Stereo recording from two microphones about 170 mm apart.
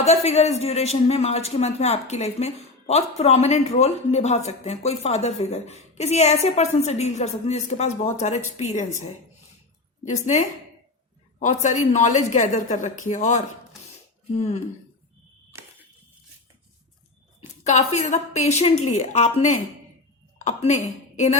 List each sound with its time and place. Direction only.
0.0 s a man's voice: 40° left (ahead or behind)
10.0 s a woman's voice: 45° left (ahead or behind)
17.6 s a woman's voice: 40° left (ahead or behind)